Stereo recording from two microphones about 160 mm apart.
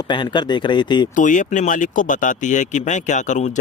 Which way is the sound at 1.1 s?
55° left (ahead or behind).